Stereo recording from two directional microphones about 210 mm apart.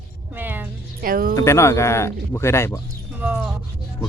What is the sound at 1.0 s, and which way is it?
Speech, 45° right (ahead or behind).